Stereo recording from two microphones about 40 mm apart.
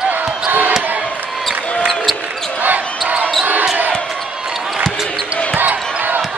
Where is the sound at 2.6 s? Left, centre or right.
Right.